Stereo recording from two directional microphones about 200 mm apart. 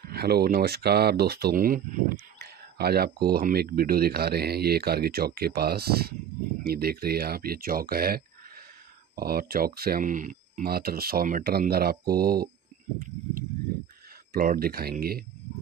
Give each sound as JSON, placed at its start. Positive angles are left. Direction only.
{"t": 0.0, "sound": "speech", "side_deg": -50}
{"t": 14.3, "sound": "speech", "side_deg": -45}